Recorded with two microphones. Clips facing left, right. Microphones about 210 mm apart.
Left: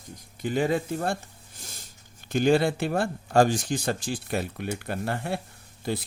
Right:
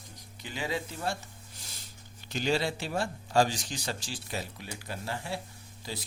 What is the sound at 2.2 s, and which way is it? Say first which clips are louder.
Speech: left 8 dB; 50° left (ahead or behind).